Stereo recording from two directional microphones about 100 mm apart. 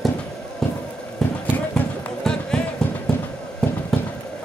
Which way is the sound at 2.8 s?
10° left (ahead or behind).